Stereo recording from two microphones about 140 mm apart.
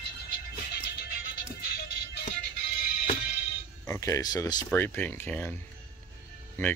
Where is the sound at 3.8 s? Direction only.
20° left (ahead or behind).